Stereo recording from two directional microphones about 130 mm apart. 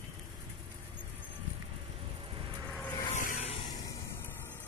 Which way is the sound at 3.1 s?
90° left.